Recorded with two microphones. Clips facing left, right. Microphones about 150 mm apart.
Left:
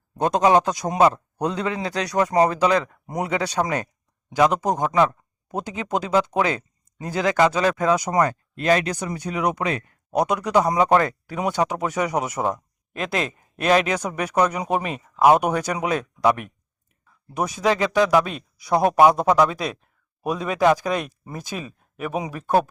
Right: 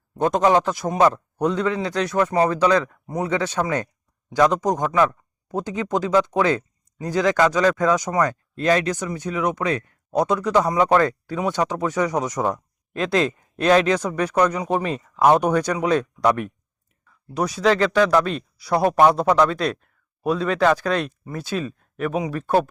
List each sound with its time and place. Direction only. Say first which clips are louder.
0.2 s speech: even; 15° left (ahead or behind)
17.6 s speech: right 2 dB; 15° left (ahead or behind)